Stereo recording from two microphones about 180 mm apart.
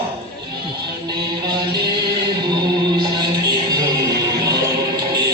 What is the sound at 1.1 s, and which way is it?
Music, 20° right (ahead or behind).